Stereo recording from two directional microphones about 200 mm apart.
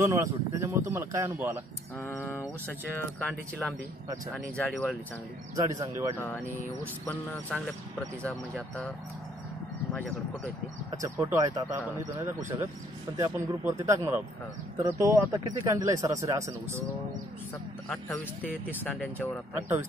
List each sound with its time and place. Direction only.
0.0 s speech: 15° right (ahead or behind)
2.0 s a man's voice: 15° left (ahead or behind)
5.7 s speech: 15° right (ahead or behind)
6.1 s a man's voice: 10° left (ahead or behind)
10.9 s speech: 15° right (ahead or behind)
17.8 s speech: 5° left (ahead or behind)